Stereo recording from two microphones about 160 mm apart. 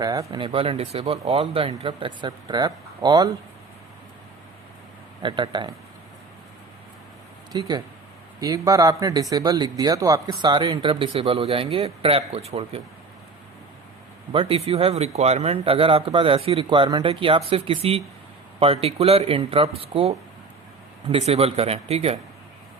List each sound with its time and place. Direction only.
0.0 s speech: 20° right (ahead or behind)
0.3 s speech: 35° right (ahead or behind)
5.2 s speech: 30° right (ahead or behind)
7.5 s speech: 25° right (ahead or behind); by 12.8 s 40° right (ahead or behind)
14.3 s speech: 35° right (ahead or behind)